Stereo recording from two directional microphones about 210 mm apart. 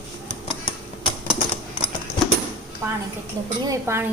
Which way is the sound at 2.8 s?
10° right (ahead or behind).